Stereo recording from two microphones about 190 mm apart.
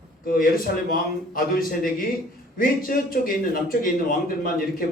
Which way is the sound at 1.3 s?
50° left (ahead or behind).